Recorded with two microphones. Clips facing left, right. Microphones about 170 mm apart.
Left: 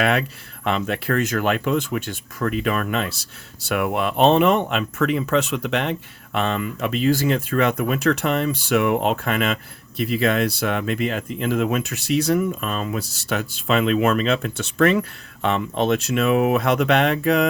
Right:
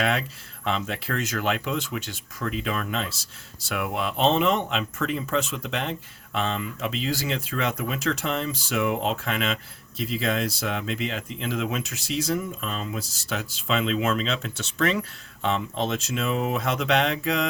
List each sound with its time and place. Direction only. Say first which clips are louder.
0.0 s speech: left 5 dB; 60° left (ahead or behind)